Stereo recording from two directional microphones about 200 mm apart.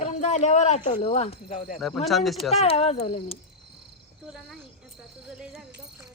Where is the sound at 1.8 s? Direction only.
Centre (ahead or behind).